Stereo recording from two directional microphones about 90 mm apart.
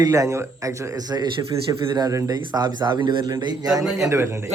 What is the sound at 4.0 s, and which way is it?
Speech, 35° right (ahead or behind).